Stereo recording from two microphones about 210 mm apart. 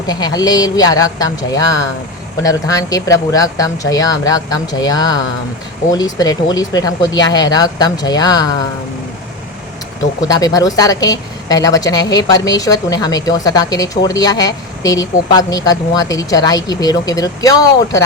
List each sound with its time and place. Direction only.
0.1 s a woman's voice: 20° left (ahead or behind)
10.2 s a woman's voice: 15° left (ahead or behind)